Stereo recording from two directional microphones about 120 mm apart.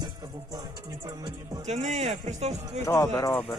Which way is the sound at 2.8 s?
25° left (ahead or behind).